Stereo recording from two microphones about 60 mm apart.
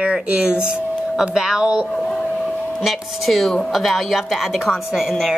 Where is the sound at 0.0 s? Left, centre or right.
Centre.